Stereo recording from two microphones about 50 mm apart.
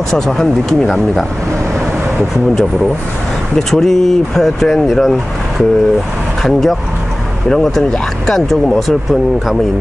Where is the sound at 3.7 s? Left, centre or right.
Centre.